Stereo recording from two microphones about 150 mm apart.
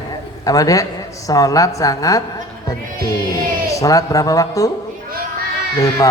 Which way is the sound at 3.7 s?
25° left (ahead or behind).